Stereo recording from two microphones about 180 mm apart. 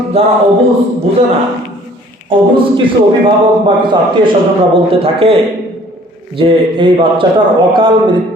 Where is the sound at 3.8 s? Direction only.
25° right (ahead or behind).